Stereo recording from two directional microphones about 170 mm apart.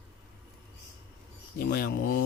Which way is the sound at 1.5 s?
60° left (ahead or behind).